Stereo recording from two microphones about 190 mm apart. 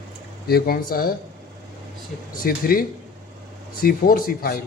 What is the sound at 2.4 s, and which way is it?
A man's voice, 50° left (ahead or behind).